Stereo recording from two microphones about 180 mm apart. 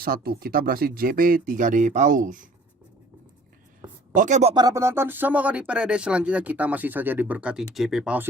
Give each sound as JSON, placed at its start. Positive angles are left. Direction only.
{"t": 0.0, "sound": "speech", "side_deg": -55}
{"t": 4.1, "sound": "speech", "side_deg": -45}
{"t": 4.5, "sound": "speech", "side_deg": -20}